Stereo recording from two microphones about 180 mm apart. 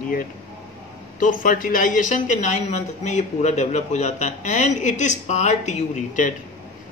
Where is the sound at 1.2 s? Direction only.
50° left (ahead or behind).